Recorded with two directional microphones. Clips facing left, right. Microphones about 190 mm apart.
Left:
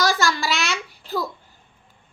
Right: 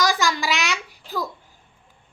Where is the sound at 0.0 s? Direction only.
15° right (ahead or behind).